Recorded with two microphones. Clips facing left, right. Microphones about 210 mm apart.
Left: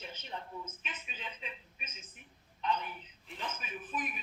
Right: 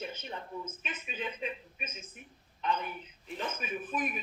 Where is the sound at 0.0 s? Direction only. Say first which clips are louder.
Right 7 dB; 50° right (ahead or behind).